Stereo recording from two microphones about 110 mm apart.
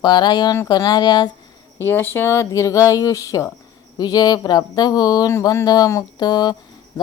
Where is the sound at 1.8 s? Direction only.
20° left (ahead or behind); by 6.5 s 40° left (ahead or behind).